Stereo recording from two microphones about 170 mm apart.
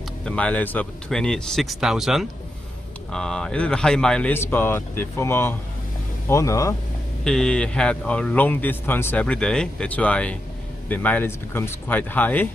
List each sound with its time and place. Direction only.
0.2 s a man's voice: 5° left (ahead or behind)
7.2 s a man's voice: 5° left (ahead or behind)